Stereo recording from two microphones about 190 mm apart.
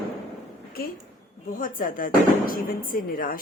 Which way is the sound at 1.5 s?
45° left (ahead or behind).